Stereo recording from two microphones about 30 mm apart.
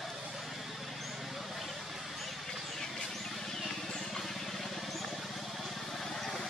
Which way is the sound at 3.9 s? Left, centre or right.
Centre.